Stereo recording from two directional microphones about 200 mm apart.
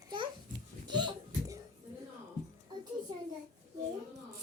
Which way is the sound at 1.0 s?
15° right (ahead or behind).